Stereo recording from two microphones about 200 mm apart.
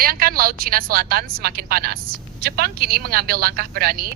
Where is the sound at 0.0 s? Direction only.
45° right (ahead or behind).